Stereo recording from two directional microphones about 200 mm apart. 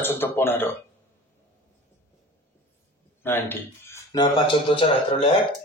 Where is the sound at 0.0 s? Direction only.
10° left (ahead or behind).